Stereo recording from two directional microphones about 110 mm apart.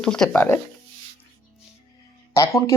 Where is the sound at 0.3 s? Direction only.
20° left (ahead or behind).